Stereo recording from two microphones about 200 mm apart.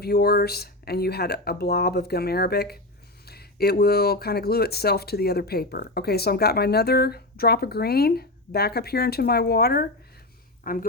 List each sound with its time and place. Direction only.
0.0 s speech: 55° left (ahead or behind)